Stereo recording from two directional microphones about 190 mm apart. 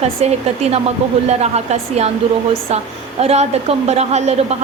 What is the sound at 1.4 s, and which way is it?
Speech, 35° right (ahead or behind).